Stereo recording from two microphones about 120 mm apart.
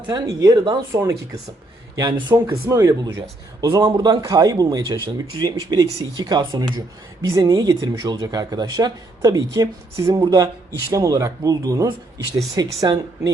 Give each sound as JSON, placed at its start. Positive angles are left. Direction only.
{"t": 0.1, "sound": "speech", "side_deg": -30}
{"t": 3.8, "sound": "speech", "side_deg": -40}